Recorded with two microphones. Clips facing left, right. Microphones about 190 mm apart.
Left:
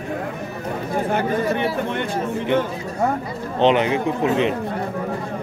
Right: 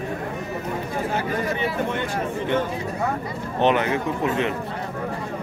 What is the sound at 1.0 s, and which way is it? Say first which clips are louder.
Speech: left 5 dB; 55° left (ahead or behind).